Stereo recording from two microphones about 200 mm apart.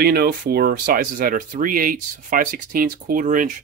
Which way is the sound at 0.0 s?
50° right (ahead or behind).